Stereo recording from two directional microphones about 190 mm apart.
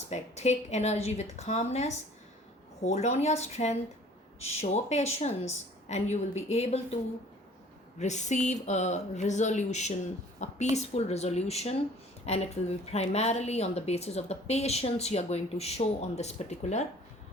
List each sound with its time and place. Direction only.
0.1 s speech: 35° left (ahead or behind)
7.9 s speech: 40° left (ahead or behind)